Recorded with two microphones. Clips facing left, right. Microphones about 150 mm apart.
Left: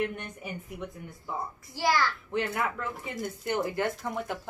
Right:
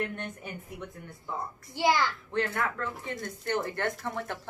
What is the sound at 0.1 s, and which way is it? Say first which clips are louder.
Speech: even; 5° left (ahead or behind).